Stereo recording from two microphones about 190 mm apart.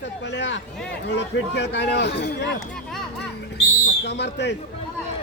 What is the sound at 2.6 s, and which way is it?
Speech, 5° left (ahead or behind).